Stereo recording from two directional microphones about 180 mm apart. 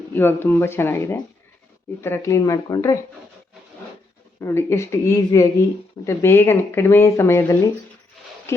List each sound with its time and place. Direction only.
0.1 s speech: 10° left (ahead or behind)
4.4 s speech: 15° left (ahead or behind)